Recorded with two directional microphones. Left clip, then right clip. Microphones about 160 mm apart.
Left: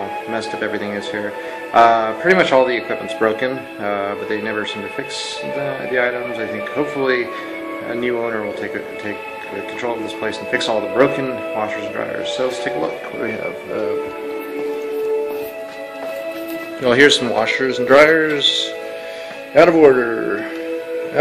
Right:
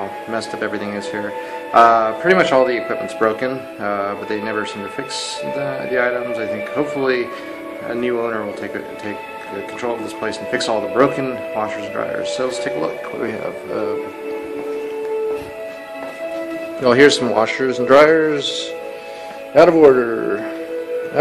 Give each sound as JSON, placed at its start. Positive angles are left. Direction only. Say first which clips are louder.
{"t": 0.3, "sound": "speech", "louder": "even", "side_deg": -5}
{"t": 9.8, "sound": "speech", "louder": "even", "side_deg": -5}
{"t": 16.8, "sound": "speech", "louder": "even", "side_deg": -20}